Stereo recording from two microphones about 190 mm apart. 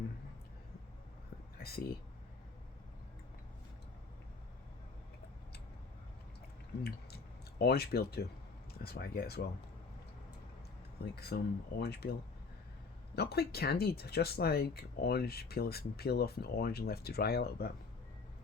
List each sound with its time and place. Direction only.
1.5 s a sound: 55° left (ahead or behind)
7.6 s speech: 55° left (ahead or behind)
11.0 s speech: 55° left (ahead or behind)
13.1 s speech: 55° left (ahead or behind)